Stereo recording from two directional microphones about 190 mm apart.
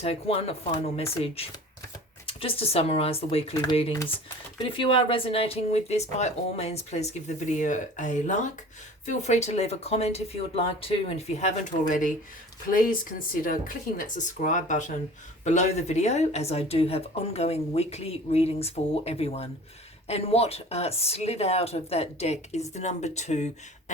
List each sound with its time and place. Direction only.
0.0 s speech: 30° left (ahead or behind)